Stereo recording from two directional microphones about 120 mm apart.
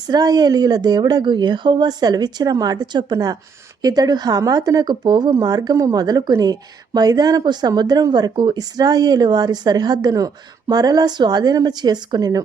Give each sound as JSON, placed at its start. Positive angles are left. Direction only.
{"t": 0.0, "sound": "a woman's voice", "side_deg": -35}